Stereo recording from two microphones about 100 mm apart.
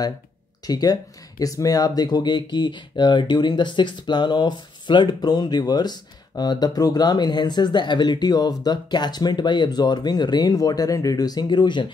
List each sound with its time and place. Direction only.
0.7 s speech: 40° left (ahead or behind)